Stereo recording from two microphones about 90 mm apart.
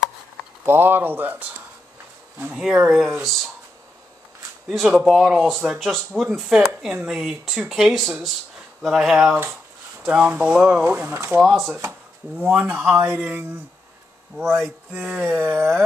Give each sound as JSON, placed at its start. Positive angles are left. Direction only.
{"t": 0.7, "sound": "speech", "side_deg": -25}
{"t": 2.5, "sound": "speech", "side_deg": -5}
{"t": 4.6, "sound": "speech", "side_deg": 0}
{"t": 10.8, "sound": "speech", "side_deg": -20}
{"t": 11.4, "sound": "speech", "side_deg": 0}
{"t": 11.8, "sound": "speech", "side_deg": -25}
{"t": 14.3, "sound": "speech", "side_deg": 0}
{"t": 14.9, "sound": "speech", "side_deg": -10}
{"t": 15.1, "sound": "speech", "side_deg": -25}